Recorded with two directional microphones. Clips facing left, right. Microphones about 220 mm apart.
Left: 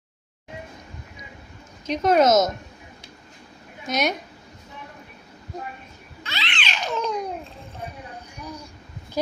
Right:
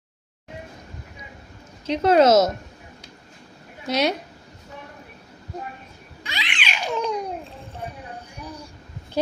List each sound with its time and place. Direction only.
1.9 s a woman's voice: 30° right (ahead or behind)
3.8 s a woman's voice: 30° right (ahead or behind)
6.2 s babbling: 15° right (ahead or behind)